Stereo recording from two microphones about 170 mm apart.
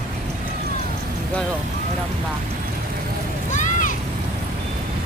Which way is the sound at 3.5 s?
45° left (ahead or behind).